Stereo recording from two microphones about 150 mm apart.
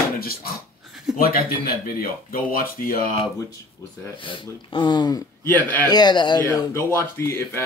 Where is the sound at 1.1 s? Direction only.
75° left (ahead or behind).